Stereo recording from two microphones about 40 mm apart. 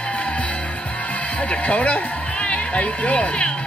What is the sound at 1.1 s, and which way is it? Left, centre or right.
Speech, left.